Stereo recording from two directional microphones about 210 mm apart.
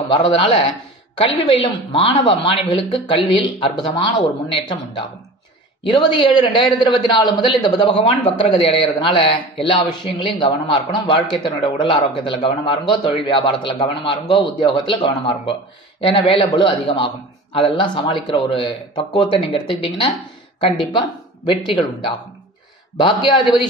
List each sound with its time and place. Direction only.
0.1 s a man's voice: 25° left (ahead or behind)
21.5 s a man's voice: 25° left (ahead or behind)